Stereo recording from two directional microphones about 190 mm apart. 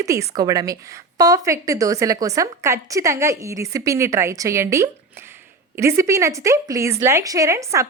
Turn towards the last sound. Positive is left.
turn(degrees=-15)  # may be behind; listen again after turning